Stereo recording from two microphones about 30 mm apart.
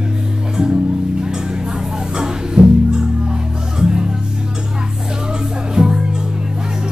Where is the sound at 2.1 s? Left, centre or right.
Right.